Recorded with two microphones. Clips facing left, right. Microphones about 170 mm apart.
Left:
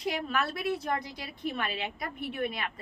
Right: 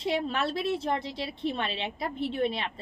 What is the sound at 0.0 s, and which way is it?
A woman's voice, 25° right (ahead or behind).